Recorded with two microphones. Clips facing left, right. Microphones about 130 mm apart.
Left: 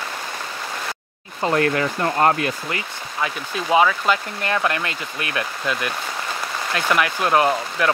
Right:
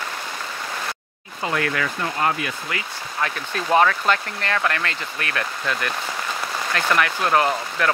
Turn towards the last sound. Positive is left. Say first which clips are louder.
# left 2 dB
turn(degrees=15)  # may be behind; listen again after turning